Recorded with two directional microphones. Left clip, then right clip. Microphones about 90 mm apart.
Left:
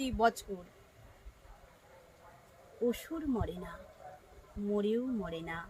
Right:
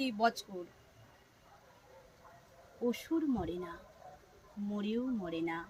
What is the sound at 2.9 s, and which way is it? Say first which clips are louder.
Speech: right 2 dB; 35° left (ahead or behind).